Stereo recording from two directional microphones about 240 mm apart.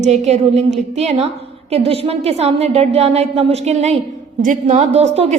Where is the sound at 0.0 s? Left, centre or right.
Right.